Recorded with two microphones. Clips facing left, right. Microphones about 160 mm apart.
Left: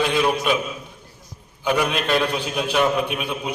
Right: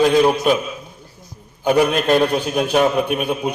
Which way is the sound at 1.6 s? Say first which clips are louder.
Right 6 dB; 40° right (ahead or behind).